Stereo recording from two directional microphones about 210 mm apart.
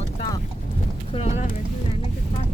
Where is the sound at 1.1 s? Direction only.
30° left (ahead or behind).